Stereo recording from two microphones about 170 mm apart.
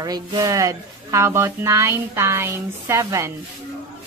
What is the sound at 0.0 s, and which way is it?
Speech, 20° right (ahead or behind).